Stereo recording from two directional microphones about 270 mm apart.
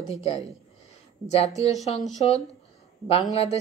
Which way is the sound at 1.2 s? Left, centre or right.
Left.